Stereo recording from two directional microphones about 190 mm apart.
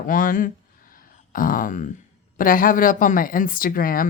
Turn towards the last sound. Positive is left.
turn(degrees=50)  # may be behind; listen again after turning